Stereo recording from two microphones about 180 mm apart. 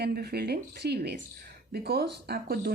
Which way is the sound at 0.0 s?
65° right (ahead or behind).